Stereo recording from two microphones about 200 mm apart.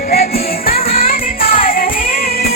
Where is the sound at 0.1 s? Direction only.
50° left (ahead or behind).